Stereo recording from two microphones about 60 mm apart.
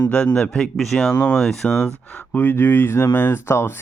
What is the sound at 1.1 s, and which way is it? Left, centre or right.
Speech, left.